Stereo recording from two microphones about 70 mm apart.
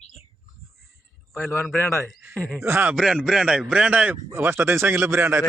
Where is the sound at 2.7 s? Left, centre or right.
Right.